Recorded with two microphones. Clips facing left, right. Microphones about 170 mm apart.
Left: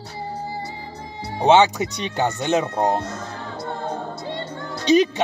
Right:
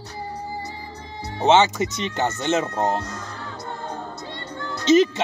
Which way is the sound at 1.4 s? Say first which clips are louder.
Left 2 dB; 15° left (ahead or behind).